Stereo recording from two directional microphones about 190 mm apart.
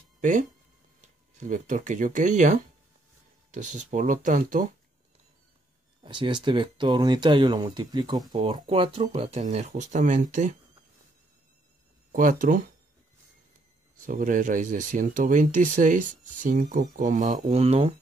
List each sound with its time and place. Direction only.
0.2 s speech: 40° right (ahead or behind)
6.0 s speech: 25° right (ahead or behind); by 10.5 s 40° right (ahead or behind)
12.1 s speech: 45° right (ahead or behind)
13.9 s speech: 45° right (ahead or behind)